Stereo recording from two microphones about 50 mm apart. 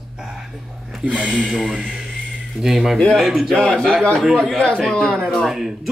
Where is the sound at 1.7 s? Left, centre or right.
Centre.